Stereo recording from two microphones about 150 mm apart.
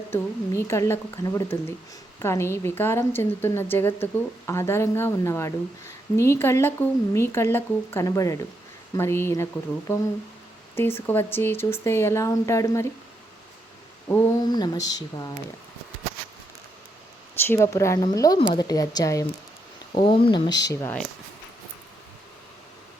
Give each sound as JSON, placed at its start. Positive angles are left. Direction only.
{"t": 0.1, "sound": "a woman's voice", "side_deg": 20}
{"t": 14.1, "sound": "speech", "side_deg": 25}
{"t": 17.4, "sound": "speech", "side_deg": 15}
{"t": 19.9, "sound": "speech", "side_deg": 35}